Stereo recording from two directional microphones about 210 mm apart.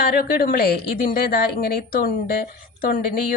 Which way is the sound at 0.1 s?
45° left (ahead or behind).